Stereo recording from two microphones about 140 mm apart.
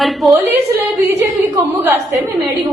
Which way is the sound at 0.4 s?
15° right (ahead or behind).